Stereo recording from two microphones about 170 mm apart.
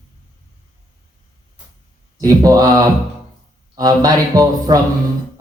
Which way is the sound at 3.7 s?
20° right (ahead or behind).